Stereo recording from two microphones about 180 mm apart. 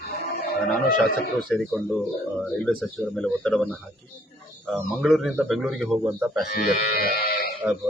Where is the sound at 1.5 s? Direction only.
5° left (ahead or behind).